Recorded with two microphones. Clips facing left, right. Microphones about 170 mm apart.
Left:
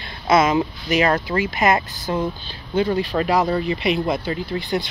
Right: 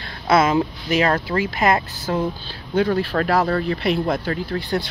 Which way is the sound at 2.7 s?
10° left (ahead or behind).